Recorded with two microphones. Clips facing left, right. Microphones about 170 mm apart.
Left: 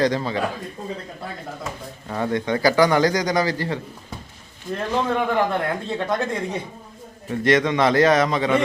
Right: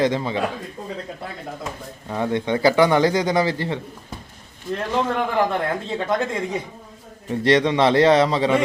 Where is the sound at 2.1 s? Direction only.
20° right (ahead or behind).